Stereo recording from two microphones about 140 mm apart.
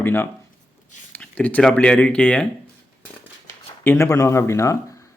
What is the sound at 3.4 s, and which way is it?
Speech, 20° left (ahead or behind).